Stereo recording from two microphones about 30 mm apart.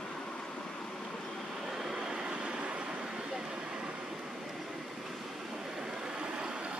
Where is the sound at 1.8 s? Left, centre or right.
Right.